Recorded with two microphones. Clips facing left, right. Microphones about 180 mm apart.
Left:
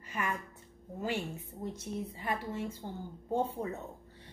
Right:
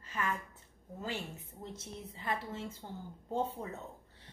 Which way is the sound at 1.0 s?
15° left (ahead or behind).